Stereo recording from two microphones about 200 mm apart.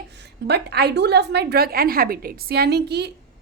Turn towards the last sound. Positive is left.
turn(degrees=-55)  # may be behind; listen again after turning